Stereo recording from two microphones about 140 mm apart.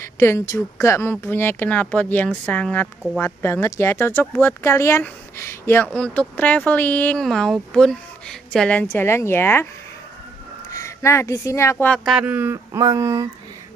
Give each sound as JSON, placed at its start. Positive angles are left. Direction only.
{"t": 0.0, "sound": "speech", "side_deg": 20}
{"t": 10.7, "sound": "speech", "side_deg": 20}
{"t": 11.9, "sound": "speech", "side_deg": 0}
{"t": 12.8, "sound": "a sound", "side_deg": -25}